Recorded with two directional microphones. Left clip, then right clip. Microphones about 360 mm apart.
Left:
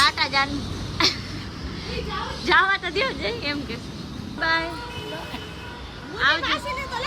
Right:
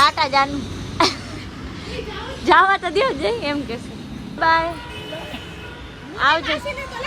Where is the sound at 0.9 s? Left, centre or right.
Centre.